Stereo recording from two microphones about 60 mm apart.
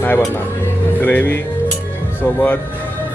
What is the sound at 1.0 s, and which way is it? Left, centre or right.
Speech, left.